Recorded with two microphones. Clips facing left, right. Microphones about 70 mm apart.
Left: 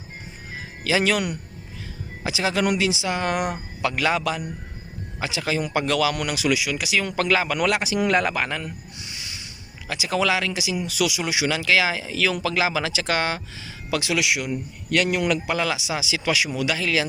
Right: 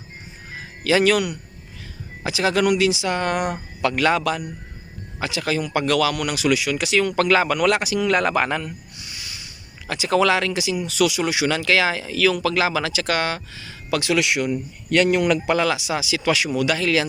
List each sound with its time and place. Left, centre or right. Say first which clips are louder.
0.9 s speech: right 4 dB; centre
2.2 s speech: right 3 dB; centre
9.0 s a sound: even; left
9.8 s speech: right 4 dB; centre
13.9 s a man's voice: right 3 dB; centre